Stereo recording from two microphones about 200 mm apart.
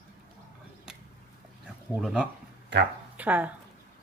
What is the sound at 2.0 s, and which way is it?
Speech, 5° right (ahead or behind).